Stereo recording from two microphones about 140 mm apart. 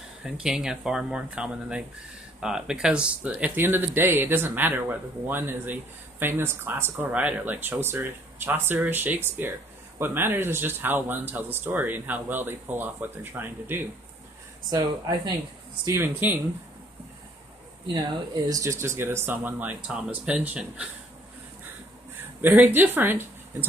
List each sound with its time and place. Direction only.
0.2 s speech: 5° right (ahead or behind)
14.7 s speech: 30° right (ahead or behind)
15.8 s speech: 15° right (ahead or behind)
17.9 s speech: 30° right (ahead or behind); by 20.8 s 10° right (ahead or behind)
22.4 s speech: 15° right (ahead or behind)